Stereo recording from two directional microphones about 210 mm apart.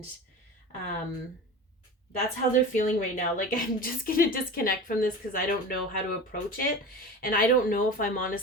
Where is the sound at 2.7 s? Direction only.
40° left (ahead or behind).